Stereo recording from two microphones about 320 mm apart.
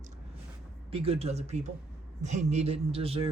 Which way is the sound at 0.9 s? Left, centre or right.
Centre.